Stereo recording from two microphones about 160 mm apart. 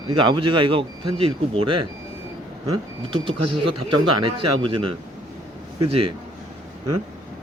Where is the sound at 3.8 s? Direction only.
30° right (ahead or behind).